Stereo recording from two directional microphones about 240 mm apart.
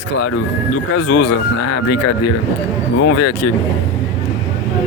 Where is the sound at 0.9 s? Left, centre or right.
Left.